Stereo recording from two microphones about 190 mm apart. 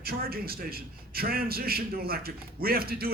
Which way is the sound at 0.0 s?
55° right (ahead or behind).